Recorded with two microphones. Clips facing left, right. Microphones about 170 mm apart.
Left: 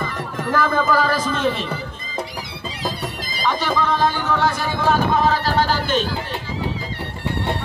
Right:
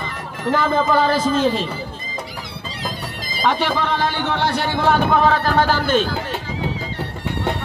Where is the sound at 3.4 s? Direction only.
65° right (ahead or behind).